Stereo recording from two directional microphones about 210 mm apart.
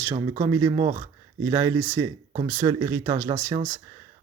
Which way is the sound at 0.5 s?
20° right (ahead or behind).